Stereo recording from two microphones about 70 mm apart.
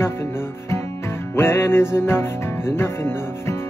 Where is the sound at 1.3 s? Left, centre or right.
Left.